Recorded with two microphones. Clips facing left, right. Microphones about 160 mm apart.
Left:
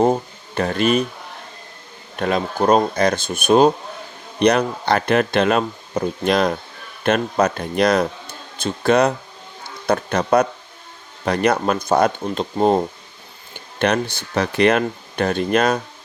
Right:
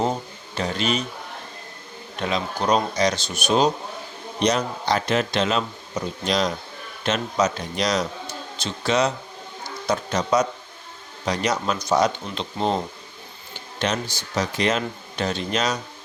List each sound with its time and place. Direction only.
0.0 s speech: 55° left (ahead or behind)
2.1 s speech: 50° left (ahead or behind)
13.7 s speech: 60° left (ahead or behind)